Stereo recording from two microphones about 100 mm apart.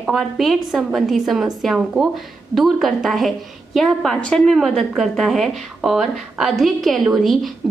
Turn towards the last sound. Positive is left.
turn(degrees=0)  # may be behind; listen again after turning